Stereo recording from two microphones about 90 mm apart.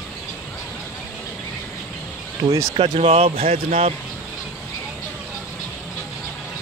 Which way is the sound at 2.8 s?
90° right.